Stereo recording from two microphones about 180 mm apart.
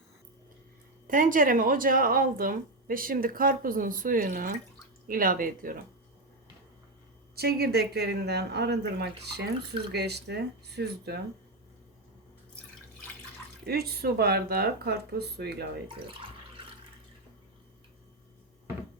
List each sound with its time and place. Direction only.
1.0 s speech: 50° right (ahead or behind)
7.3 s speech: 60° right (ahead or behind)
13.7 s speech: 60° right (ahead or behind)